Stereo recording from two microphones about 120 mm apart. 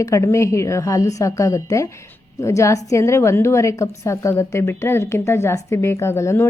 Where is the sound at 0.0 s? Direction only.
25° left (ahead or behind).